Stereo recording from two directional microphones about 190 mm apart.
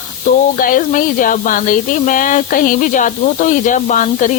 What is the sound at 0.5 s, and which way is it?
Speech, 45° left (ahead or behind).